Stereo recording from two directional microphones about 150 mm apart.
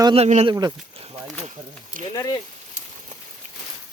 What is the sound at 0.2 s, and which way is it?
Speech, 45° right (ahead or behind).